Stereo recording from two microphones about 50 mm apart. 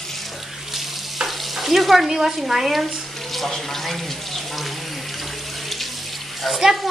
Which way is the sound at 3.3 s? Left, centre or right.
Centre.